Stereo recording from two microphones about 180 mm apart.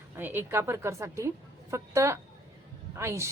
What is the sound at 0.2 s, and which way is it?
A woman's voice, 10° right (ahead or behind).